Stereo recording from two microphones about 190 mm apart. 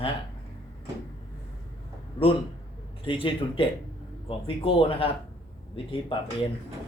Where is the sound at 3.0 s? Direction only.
25° left (ahead or behind).